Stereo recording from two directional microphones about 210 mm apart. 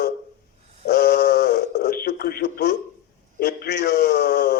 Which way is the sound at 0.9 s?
45° left (ahead or behind).